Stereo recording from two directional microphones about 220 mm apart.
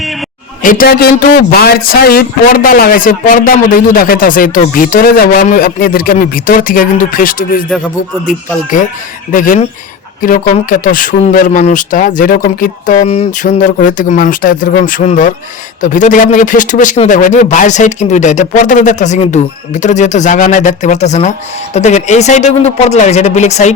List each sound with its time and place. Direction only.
0.6 s a man's voice: 40° left (ahead or behind)
8.7 s a man's voice: 35° left (ahead or behind)